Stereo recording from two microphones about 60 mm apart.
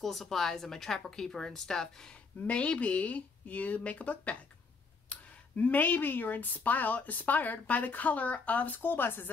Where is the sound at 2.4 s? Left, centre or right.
Left.